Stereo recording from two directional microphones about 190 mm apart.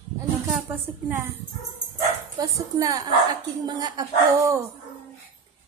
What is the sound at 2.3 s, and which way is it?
Speech, 15° right (ahead or behind).